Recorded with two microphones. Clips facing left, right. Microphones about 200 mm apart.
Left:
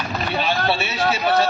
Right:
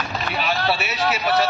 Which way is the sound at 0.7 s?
25° left (ahead or behind).